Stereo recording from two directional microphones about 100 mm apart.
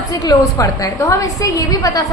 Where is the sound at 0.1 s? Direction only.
35° left (ahead or behind).